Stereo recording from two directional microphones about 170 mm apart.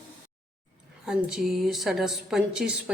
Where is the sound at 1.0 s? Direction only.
5° right (ahead or behind).